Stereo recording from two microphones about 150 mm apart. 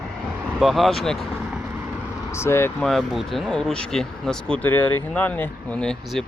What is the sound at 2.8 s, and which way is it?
Speech, centre (ahead or behind).